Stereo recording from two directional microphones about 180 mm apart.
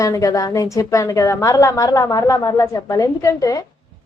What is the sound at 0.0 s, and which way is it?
A woman's voice, 20° left (ahead or behind).